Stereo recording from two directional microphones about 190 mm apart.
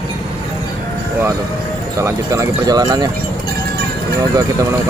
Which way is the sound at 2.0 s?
15° right (ahead or behind).